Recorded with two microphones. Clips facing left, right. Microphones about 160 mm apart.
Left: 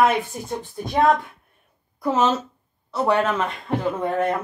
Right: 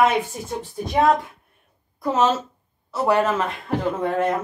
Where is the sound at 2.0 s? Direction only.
Centre (ahead or behind).